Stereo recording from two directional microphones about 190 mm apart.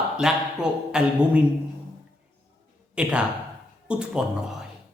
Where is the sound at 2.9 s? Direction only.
5° right (ahead or behind).